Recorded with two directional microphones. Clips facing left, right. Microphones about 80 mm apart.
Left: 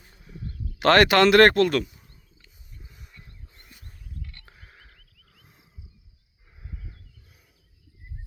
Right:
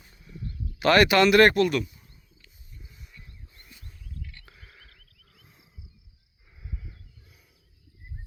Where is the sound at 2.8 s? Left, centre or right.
Left.